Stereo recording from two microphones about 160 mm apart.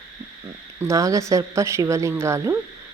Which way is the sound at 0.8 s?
20° right (ahead or behind).